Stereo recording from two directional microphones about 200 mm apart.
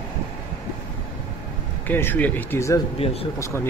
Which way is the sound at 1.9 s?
10° left (ahead or behind).